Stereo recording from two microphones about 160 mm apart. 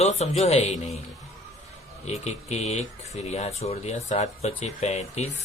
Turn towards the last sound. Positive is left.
turn(degrees=45)  # may be behind; listen again after turning